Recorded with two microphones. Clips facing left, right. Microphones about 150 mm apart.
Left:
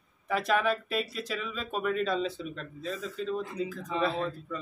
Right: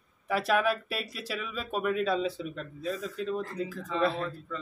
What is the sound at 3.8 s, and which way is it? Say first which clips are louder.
Speech: right 3 dB; 15° left (ahead or behind).